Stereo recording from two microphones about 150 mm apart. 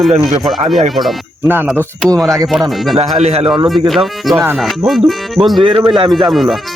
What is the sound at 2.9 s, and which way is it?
Speech, 45° right (ahead or behind).